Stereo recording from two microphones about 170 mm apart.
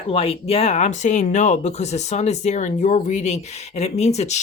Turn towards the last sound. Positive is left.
turn(degrees=40)  # may be behind; listen again after turning